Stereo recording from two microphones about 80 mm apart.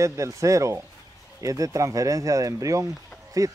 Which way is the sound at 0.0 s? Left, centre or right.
Right.